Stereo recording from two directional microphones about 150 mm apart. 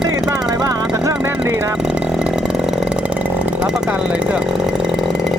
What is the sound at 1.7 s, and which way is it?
Chainsaw, 5° right (ahead or behind).